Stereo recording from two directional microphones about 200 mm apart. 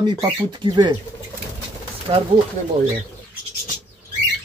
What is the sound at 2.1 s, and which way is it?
Speech, 25° right (ahead or behind).